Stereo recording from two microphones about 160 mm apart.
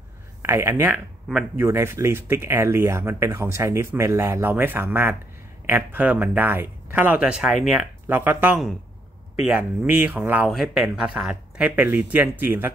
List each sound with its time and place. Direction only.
0.4 s speech: 15° right (ahead or behind)